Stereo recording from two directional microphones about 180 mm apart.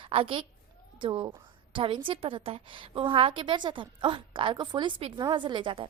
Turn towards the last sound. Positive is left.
turn(degrees=-30)  # may be behind; listen again after turning